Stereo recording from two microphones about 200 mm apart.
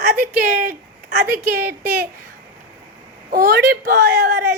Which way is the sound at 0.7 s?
50° right (ahead or behind).